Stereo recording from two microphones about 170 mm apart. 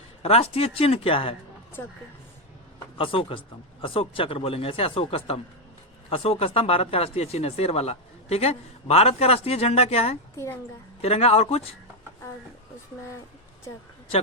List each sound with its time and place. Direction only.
0.2 s speech: 35° left (ahead or behind)
3.0 s speech: 30° left (ahead or behind)
10.3 s speech: 15° left (ahead or behind)
11.0 s speech: 35° left (ahead or behind)